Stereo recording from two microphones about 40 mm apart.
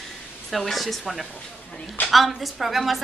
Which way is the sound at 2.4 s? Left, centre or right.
Centre.